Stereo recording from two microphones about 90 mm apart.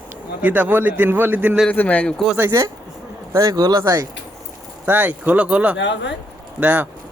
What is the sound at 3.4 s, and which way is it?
Speech, 45° right (ahead or behind).